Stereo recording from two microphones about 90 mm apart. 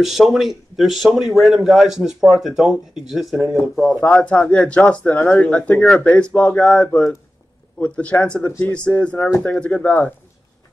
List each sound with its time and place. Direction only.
0.0 s a man's voice: centre (ahead or behind)
4.0 s a man's voice: 15° left (ahead or behind)
8.5 s speech: 25° left (ahead or behind)
8.7 s speech: 10° left (ahead or behind)